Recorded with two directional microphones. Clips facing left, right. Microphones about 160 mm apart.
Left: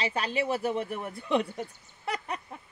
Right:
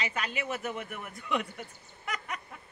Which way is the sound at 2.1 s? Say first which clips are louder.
Left 5 dB; 30° left (ahead or behind).